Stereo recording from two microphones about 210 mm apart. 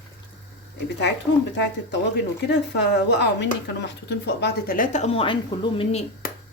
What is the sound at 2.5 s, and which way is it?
Speech, 55° left (ahead or behind).